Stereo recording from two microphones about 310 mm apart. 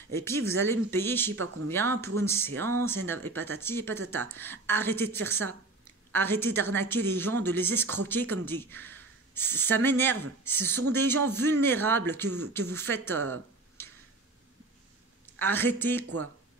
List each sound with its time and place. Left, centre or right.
0.1 s a woman's voice: centre
1.3 s speech: right
1.7 s a woman's voice: centre
13.8 s tick-tock: centre
15.3 s a woman's voice: centre